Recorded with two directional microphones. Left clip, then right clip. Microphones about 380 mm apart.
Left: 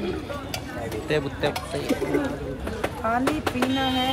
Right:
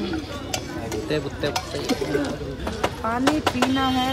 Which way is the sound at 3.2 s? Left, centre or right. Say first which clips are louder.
Right 4 dB; right.